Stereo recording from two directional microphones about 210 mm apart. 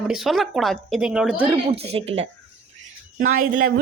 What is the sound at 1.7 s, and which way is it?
Speech, 30° right (ahead or behind).